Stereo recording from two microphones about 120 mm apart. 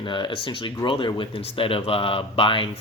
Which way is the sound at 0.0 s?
40° left (ahead or behind).